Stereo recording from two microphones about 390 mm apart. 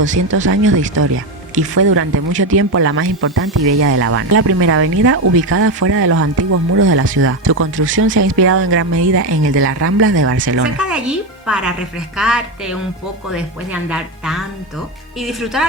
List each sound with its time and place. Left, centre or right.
0.0 s speech: right
10.8 s speech: centre